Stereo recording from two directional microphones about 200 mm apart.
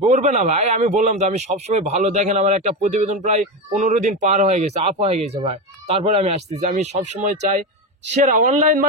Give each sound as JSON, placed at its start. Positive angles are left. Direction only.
{"t": 0.0, "sound": "speech", "side_deg": -35}